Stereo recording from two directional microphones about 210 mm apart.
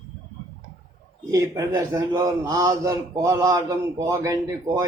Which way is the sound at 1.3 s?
15° right (ahead or behind).